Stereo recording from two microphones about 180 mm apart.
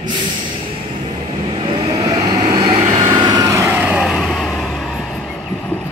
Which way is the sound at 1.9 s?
20° right (ahead or behind).